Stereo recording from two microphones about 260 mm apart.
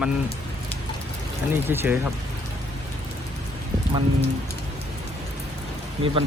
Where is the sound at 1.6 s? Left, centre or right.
Centre.